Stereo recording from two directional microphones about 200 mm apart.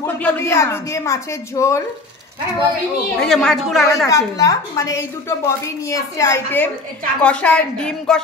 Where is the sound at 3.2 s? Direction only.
5° left (ahead or behind).